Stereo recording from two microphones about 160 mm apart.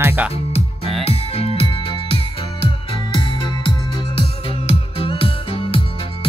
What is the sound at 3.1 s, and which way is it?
Music, 30° left (ahead or behind).